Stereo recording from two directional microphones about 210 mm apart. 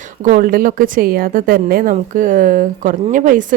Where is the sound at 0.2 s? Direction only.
40° right (ahead or behind).